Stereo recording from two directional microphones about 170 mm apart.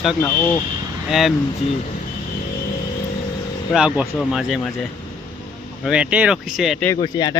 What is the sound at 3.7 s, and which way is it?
Speech, 5° right (ahead or behind).